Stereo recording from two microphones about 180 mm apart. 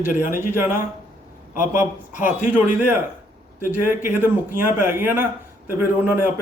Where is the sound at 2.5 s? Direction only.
10° right (ahead or behind).